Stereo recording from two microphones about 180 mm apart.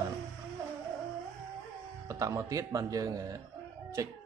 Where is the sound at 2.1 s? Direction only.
20° right (ahead or behind).